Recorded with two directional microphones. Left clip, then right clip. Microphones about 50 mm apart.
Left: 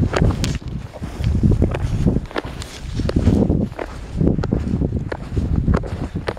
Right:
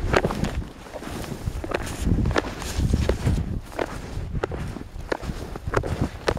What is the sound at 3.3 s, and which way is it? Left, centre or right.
Walk, left.